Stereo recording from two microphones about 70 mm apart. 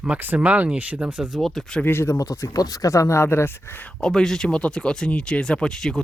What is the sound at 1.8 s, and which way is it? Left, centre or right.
Speech, left.